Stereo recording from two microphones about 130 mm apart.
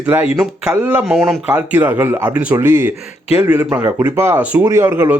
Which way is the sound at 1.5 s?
15° right (ahead or behind).